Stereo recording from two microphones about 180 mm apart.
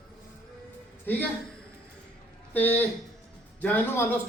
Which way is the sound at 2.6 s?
10° left (ahead or behind).